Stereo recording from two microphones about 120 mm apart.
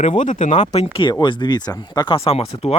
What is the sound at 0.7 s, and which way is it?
Speech, 60° left (ahead or behind).